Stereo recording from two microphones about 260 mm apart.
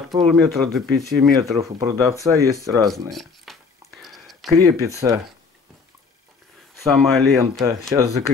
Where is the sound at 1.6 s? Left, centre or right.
Centre.